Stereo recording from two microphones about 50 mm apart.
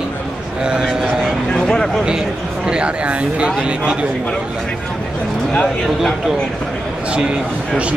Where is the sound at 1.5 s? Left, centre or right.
Centre.